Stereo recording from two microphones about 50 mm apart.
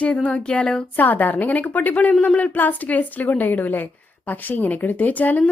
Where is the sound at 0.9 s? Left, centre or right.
Left.